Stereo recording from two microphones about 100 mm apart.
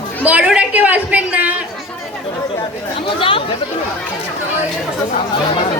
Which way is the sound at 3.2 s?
60° left (ahead or behind).